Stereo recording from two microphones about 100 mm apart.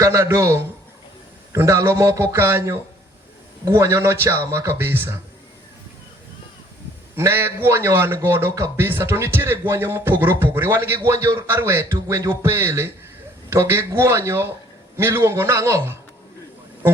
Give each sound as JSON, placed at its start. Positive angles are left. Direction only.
{"t": 0.0, "sound": "speech", "side_deg": -30}
{"t": 7.2, "sound": "speech", "side_deg": -25}